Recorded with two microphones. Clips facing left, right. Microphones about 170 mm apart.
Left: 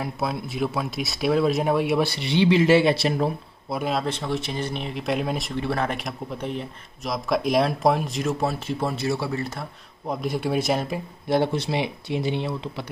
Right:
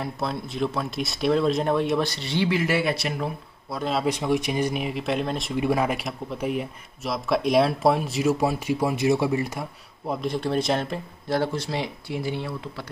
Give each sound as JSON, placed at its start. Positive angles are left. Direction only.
{"t": 0.0, "sound": "speech", "side_deg": 5}
{"t": 3.9, "sound": "speech", "side_deg": -10}
{"t": 5.5, "sound": "speech", "side_deg": -10}
{"t": 10.0, "sound": "speech", "side_deg": 5}
{"t": 11.2, "sound": "speech", "side_deg": 20}